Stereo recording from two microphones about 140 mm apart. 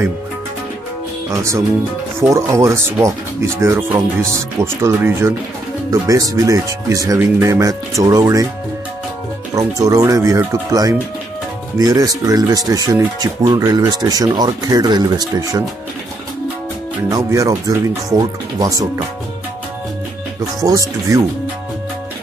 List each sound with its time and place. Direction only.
1.3 s speech: 20° right (ahead or behind)
9.5 s speech: 25° right (ahead or behind)
17.3 s speech: 20° right (ahead or behind)
20.6 s speech: 25° right (ahead or behind)